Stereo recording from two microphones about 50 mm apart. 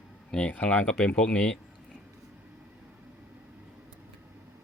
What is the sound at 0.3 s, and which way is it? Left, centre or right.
Speech, centre.